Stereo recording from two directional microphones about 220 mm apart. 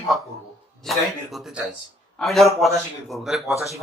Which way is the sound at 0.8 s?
Centre (ahead or behind).